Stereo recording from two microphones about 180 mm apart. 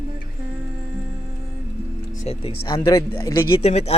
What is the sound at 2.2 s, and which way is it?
A man's voice, 35° left (ahead or behind).